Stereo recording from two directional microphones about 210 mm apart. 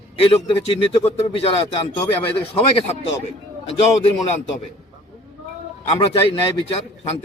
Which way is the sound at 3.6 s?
30° left (ahead or behind).